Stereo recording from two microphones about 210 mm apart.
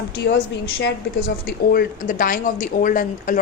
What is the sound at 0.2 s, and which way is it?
A woman's voice, 50° left (ahead or behind).